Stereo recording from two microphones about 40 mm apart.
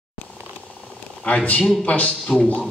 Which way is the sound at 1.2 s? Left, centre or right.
Left.